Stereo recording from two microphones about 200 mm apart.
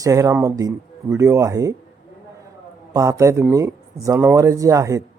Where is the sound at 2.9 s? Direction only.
15° right (ahead or behind).